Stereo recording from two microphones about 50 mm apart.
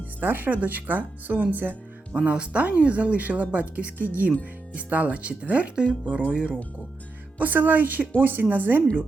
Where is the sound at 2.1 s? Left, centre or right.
Centre.